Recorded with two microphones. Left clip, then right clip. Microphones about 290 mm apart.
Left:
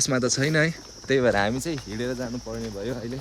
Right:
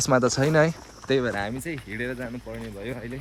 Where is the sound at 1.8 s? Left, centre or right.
Centre.